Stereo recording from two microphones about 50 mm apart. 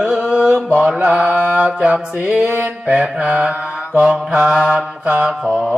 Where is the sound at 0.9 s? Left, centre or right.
Centre.